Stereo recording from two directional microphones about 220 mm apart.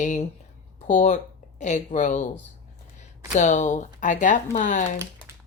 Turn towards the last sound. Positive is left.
turn(degrees=35)  # may be behind; listen again after turning